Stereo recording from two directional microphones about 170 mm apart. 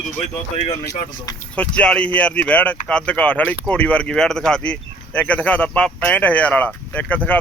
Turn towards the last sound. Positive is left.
turn(degrees=10)  # may be behind; listen again after turning